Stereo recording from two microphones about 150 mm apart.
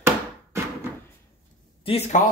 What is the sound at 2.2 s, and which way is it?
Speech, 60° left (ahead or behind).